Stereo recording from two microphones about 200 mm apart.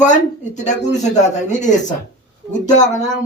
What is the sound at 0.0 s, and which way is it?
Speech, 35° left (ahead or behind).